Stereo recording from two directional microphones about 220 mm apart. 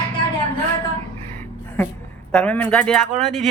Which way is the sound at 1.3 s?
10° left (ahead or behind).